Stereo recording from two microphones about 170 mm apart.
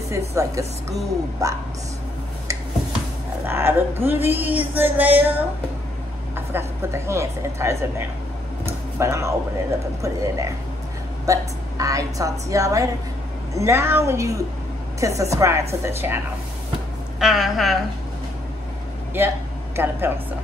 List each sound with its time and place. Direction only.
0.3 s a woman's voice: 20° right (ahead or behind)
3.4 s a woman's voice: 15° right (ahead or behind)
8.6 s a sound: 15° right (ahead or behind)
10.0 s a woman's voice: 20° right (ahead or behind)
17.2 s a woman's voice: centre (ahead or behind)
19.1 s speech: 15° right (ahead or behind)